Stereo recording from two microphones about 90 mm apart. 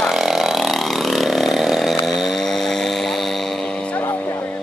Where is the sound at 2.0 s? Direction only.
Centre (ahead or behind).